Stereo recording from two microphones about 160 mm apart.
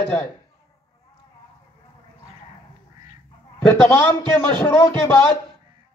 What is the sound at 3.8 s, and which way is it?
Speech, 15° left (ahead or behind).